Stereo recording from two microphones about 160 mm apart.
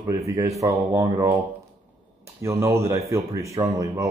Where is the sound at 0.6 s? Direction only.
20° right (ahead or behind).